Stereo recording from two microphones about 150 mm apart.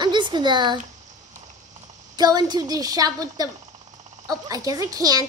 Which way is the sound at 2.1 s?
25° right (ahead or behind).